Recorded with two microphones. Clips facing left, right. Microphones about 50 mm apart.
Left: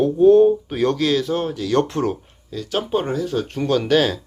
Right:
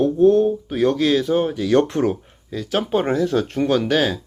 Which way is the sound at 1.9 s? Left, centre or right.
Centre.